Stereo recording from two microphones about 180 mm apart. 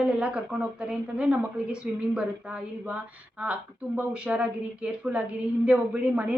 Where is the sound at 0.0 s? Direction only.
5° right (ahead or behind).